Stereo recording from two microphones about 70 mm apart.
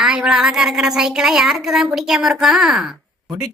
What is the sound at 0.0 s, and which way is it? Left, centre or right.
Speech, centre.